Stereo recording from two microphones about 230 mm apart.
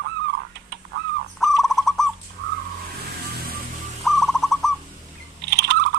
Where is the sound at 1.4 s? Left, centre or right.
Centre.